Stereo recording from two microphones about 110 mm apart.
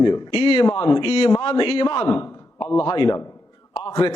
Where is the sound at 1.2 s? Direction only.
35° left (ahead or behind).